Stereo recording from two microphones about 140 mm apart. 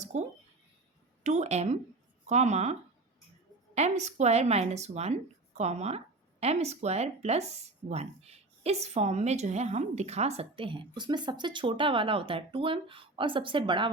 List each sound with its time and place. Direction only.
0.0 s a sound: 55° right (ahead or behind)
1.2 s a woman's voice: 55° right (ahead or behind)
3.8 s speech: 55° right (ahead or behind); by 13.9 s 35° right (ahead or behind)